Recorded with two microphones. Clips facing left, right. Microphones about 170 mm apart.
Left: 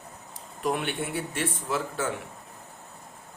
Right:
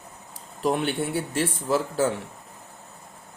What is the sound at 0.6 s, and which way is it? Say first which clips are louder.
Speech: right 4 dB; 30° right (ahead or behind).